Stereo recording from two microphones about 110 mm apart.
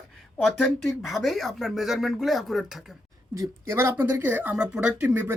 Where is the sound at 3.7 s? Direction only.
25° right (ahead or behind).